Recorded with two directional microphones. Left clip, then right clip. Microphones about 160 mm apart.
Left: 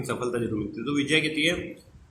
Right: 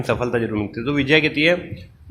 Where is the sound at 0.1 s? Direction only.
45° right (ahead or behind).